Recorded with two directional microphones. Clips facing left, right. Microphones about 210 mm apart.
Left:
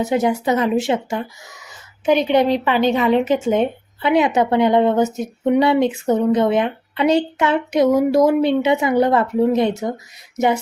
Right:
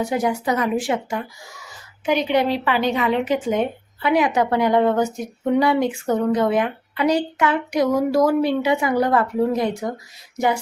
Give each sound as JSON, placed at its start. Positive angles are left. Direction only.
{"t": 0.0, "sound": "speech", "side_deg": 20}